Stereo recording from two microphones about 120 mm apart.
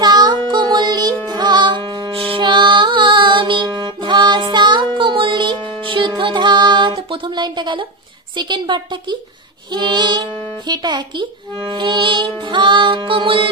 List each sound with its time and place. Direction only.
0.0 s music: 35° right (ahead or behind)
8.4 s a child's voice: 40° right (ahead or behind)